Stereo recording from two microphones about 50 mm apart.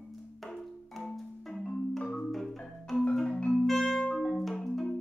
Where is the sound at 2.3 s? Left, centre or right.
Centre.